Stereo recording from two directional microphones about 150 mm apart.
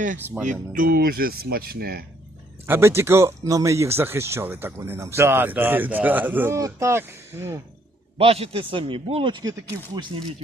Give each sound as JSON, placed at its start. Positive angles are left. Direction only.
{"t": 0.7, "sound": "speech", "side_deg": -80}
{"t": 2.6, "sound": "speech", "side_deg": -15}
{"t": 8.2, "sound": "a man's voice", "side_deg": -40}